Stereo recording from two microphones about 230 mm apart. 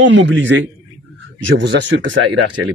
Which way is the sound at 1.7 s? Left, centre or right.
Right.